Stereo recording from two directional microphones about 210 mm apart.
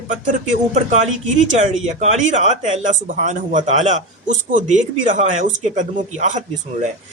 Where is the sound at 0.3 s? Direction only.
35° right (ahead or behind).